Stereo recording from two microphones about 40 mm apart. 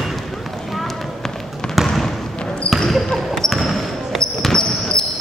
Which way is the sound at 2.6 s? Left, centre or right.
Left.